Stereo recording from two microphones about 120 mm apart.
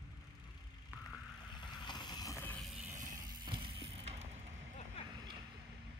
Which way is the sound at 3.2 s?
35° right (ahead or behind).